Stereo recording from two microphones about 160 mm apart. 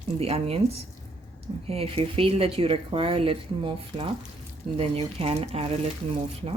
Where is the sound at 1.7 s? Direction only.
35° right (ahead or behind).